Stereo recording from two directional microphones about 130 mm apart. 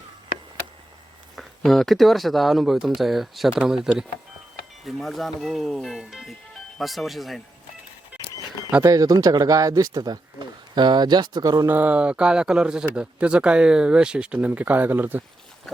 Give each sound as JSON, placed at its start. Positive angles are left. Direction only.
{"t": 1.4, "sound": "speech", "side_deg": 0}
{"t": 8.8, "sound": "speech", "side_deg": -25}
{"t": 11.6, "sound": "speech", "side_deg": -15}